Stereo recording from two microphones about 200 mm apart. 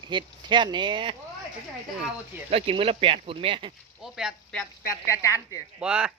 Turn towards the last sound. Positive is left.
turn(degrees=-5)  # may be behind; listen again after turning